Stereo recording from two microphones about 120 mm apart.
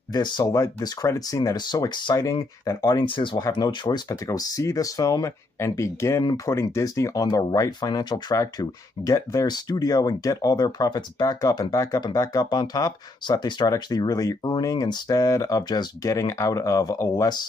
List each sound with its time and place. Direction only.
0.1 s speech: 35° left (ahead or behind)
3.3 s speech: 30° left (ahead or behind)